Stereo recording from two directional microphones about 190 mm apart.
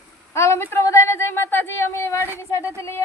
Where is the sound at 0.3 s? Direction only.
15° left (ahead or behind).